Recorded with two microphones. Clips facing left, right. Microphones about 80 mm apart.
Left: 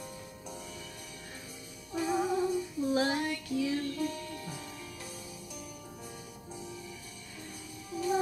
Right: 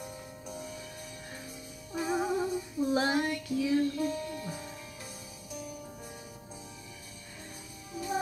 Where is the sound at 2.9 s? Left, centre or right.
Right.